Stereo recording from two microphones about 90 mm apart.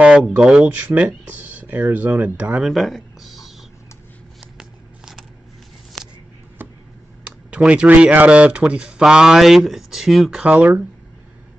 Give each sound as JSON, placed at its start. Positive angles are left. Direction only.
{"t": 0.0, "sound": "speech", "side_deg": -15}
{"t": 2.6, "sound": "speech", "side_deg": 0}
{"t": 4.6, "sound": "a sound", "side_deg": -5}
{"t": 6.6, "sound": "a sound", "side_deg": -20}
{"t": 7.2, "sound": "speech", "side_deg": -15}
{"t": 10.4, "sound": "speech", "side_deg": -15}